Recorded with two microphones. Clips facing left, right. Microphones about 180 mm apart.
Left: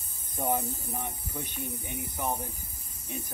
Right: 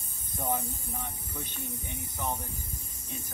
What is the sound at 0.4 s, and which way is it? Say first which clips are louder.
Speech: left 3 dB; 10° left (ahead or behind).